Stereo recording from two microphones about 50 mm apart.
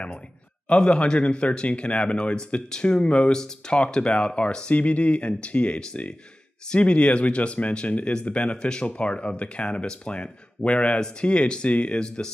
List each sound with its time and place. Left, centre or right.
0.7 s speech: left